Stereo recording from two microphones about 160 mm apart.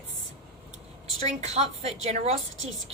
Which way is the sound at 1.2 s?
45° right (ahead or behind).